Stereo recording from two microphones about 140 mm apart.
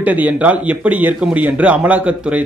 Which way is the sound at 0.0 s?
10° right (ahead or behind).